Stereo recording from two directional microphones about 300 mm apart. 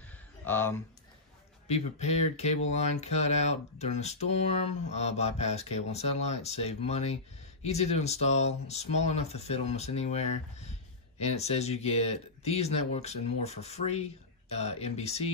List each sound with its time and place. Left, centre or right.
0.5 s speech: centre
1.7 s speech: left